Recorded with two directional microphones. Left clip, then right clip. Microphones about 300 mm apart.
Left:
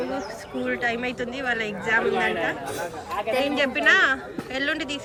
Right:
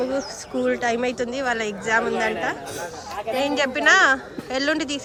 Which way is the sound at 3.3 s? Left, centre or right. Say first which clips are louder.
Right 2 dB; centre.